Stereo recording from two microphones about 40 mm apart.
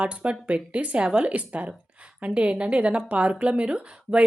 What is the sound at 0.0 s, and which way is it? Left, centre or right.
A woman's voice, right.